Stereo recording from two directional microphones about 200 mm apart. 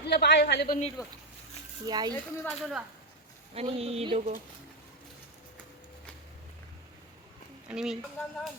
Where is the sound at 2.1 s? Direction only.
5° left (ahead or behind).